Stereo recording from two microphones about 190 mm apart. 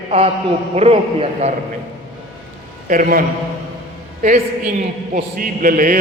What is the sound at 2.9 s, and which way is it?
Speech, 45° right (ahead or behind).